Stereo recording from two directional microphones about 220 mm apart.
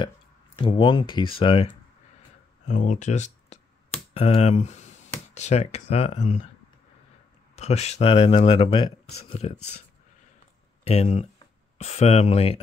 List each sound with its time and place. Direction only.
0.6 s speech: 20° left (ahead or behind)
7.5 s speech: 30° left (ahead or behind)
10.8 s speech: 30° left (ahead or behind)